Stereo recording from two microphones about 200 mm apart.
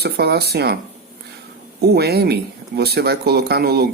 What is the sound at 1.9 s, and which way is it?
Speech, 55° right (ahead or behind).